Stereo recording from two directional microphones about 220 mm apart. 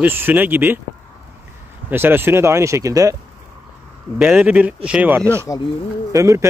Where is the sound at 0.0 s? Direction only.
10° right (ahead or behind).